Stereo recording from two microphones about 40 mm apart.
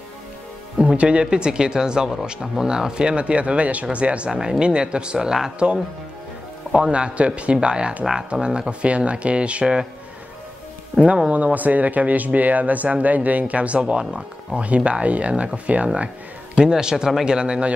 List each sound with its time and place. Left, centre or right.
0.9 s speech: right
4.3 s speech: centre
8.0 s speech: centre
8.3 s speech: right
11.2 s speech: right
16.5 s speech: centre